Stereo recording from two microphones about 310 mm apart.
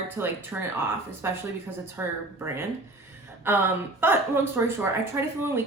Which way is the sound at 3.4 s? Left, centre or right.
Centre.